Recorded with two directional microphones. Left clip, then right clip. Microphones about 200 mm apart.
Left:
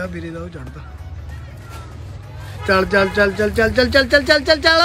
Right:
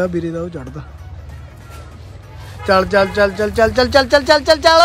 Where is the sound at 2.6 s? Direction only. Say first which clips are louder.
Right 2 dB; 15° right (ahead or behind).